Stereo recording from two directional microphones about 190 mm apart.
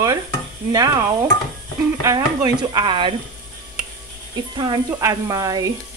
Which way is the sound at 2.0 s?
20° right (ahead or behind).